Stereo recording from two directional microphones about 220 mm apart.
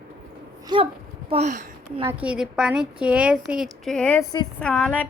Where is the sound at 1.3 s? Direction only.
30° right (ahead or behind).